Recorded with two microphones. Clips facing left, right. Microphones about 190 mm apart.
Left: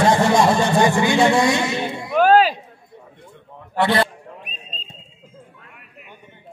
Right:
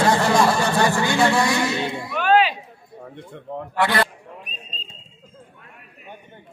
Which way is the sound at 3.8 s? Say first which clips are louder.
Left 3 dB; 25° left (ahead or behind).